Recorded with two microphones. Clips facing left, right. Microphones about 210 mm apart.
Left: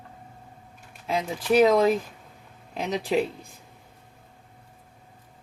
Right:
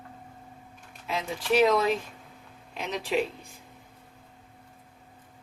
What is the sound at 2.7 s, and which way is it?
Speech, 35° left (ahead or behind).